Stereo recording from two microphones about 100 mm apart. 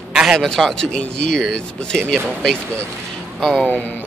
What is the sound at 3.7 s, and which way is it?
Speech, 20° left (ahead or behind).